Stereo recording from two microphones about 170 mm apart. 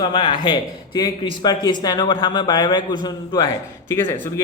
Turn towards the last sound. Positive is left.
turn(degrees=15)  # may be behind; listen again after turning